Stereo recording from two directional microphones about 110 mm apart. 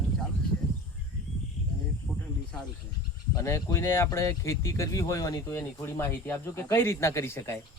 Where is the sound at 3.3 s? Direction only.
25° left (ahead or behind).